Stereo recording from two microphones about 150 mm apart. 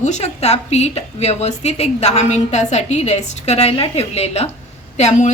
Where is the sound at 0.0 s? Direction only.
50° left (ahead or behind).